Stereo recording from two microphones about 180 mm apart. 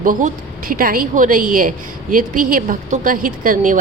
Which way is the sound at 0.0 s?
45° right (ahead or behind).